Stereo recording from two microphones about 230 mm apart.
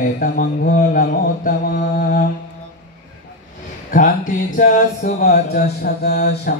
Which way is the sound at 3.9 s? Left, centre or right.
Left.